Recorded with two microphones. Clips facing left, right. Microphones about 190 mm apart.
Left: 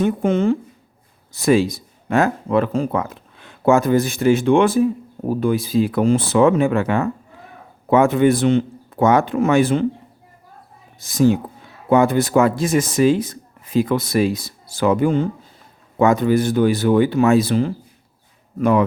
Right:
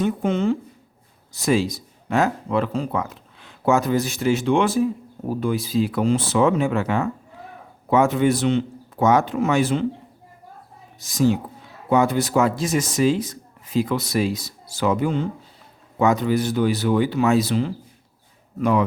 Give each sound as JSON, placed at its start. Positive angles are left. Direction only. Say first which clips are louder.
{"t": 0.0, "sound": "speech", "louder": "left 4 dB", "side_deg": 50}
{"t": 11.0, "sound": "speech", "louder": "left 4 dB", "side_deg": 55}